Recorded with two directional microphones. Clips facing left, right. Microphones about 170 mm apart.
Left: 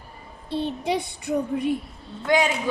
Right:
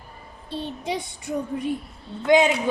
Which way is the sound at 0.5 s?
65° left (ahead or behind).